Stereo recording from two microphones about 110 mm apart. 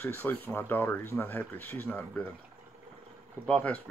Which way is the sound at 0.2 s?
15° left (ahead or behind).